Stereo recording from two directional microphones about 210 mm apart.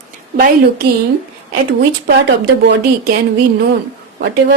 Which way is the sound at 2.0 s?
55° right (ahead or behind).